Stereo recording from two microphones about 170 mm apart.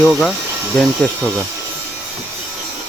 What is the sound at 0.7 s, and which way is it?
Speech, 5° left (ahead or behind).